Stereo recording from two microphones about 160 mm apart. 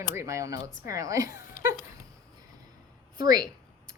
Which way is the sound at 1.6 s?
55° left (ahead or behind).